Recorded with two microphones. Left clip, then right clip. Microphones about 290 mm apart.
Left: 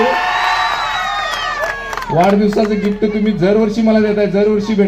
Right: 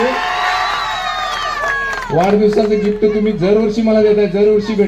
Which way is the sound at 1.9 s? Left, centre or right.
Left.